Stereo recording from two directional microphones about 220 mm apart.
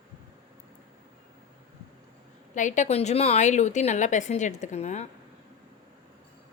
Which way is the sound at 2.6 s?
35° left (ahead or behind).